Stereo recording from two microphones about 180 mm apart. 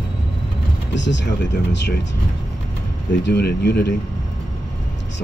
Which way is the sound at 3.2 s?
65° left (ahead or behind).